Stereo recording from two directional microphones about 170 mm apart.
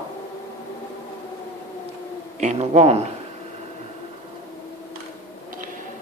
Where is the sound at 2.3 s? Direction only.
40° right (ahead or behind).